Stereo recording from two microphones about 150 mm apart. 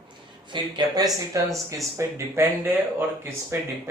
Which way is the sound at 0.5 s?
30° right (ahead or behind).